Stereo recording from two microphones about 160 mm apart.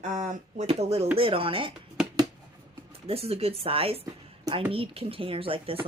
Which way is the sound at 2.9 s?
40° right (ahead or behind).